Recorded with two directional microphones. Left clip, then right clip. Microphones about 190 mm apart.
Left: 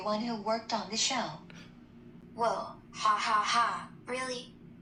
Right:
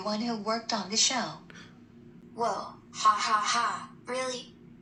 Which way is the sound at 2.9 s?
30° right (ahead or behind).